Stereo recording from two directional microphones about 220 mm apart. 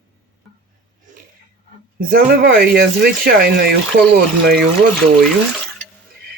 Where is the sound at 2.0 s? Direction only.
40° right (ahead or behind).